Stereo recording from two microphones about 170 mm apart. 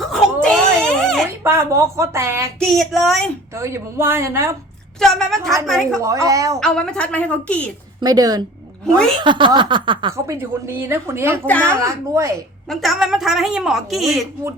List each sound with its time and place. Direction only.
0.4 s a sound: 5° left (ahead or behind)
1.5 s a woman's voice: 15° right (ahead or behind)
2.6 s a woman's voice: centre (ahead or behind)
3.5 s a woman's voice: 15° right (ahead or behind)
4.9 s a woman's voice: 5° left (ahead or behind)
5.4 s a sound: 20° right (ahead or behind)
5.6 s a woman's voice: centre (ahead or behind)
6.0 s a sound: 20° right (ahead or behind)
6.6 s a woman's voice: 5° left (ahead or behind)
8.0 s a sound: 20° right (ahead or behind)
10.2 s a woman's voice: 15° right (ahead or behind)
11.4 s a woman's voice: 10° left (ahead or behind)
11.8 s a woman's voice: 20° right (ahead or behind)
12.6 s a woman's voice: centre (ahead or behind)